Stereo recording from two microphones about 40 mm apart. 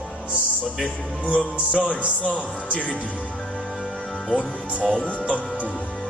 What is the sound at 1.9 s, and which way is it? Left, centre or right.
Speech, right.